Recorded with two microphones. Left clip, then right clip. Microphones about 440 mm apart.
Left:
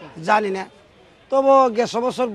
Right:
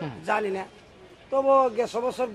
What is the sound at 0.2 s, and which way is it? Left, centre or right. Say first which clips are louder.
Speech: left 8 dB; left.